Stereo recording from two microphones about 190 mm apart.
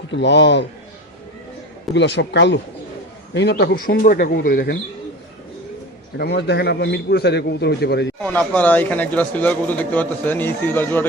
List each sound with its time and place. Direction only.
0.1 s a man's voice: 65° left (ahead or behind)
2.0 s a man's voice: 65° left (ahead or behind)
6.1 s a man's voice: 60° left (ahead or behind)
8.2 s speech: 5° left (ahead or behind)